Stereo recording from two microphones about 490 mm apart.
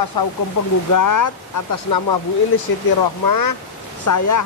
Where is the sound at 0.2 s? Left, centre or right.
Left.